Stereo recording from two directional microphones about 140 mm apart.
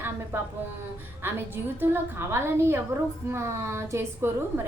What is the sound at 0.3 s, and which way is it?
Speech, 15° right (ahead or behind).